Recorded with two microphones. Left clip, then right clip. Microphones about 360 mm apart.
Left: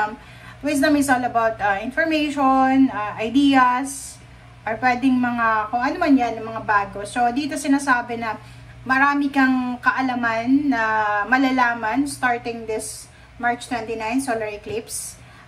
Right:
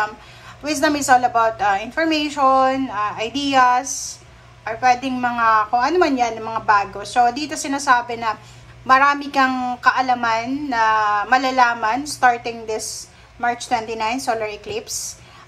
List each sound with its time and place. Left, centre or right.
0.7 s a woman's voice: centre